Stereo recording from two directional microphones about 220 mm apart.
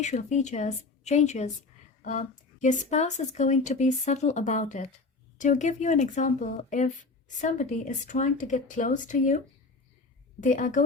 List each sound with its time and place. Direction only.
0.0 s speech: 30° left (ahead or behind)
10.4 s speech: 35° left (ahead or behind)